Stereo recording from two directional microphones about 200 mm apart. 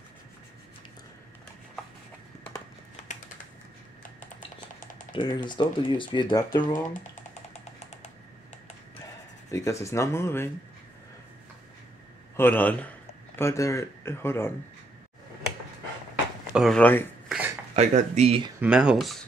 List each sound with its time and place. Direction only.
5.1 s speech: 20° left (ahead or behind)
7.5 s music: 35° left (ahead or behind)
9.5 s speech: 15° left (ahead or behind)
12.4 s speech: 10° left (ahead or behind)
16.5 s speech: centre (ahead or behind)
17.7 s speech: 35° right (ahead or behind)
18.6 s speech: 5° right (ahead or behind)